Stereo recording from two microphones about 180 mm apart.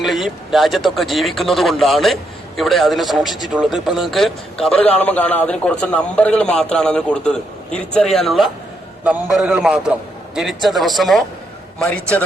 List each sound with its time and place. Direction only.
0.0 s a man's voice: centre (ahead or behind)